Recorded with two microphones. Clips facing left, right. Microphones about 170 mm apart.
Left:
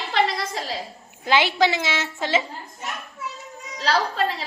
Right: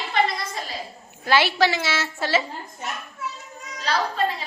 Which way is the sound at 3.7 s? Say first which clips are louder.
Left 2 dB; 90° left.